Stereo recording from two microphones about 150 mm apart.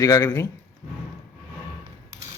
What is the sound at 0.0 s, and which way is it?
Speech, 25° left (ahead or behind).